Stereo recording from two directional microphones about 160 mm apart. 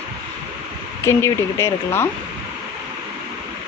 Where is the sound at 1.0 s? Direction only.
15° left (ahead or behind).